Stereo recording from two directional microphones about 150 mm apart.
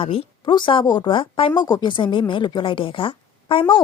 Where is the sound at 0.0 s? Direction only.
35° left (ahead or behind).